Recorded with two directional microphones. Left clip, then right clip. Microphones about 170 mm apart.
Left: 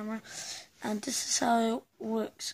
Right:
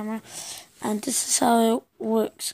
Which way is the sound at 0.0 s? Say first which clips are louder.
Right 5 dB; 20° right (ahead or behind).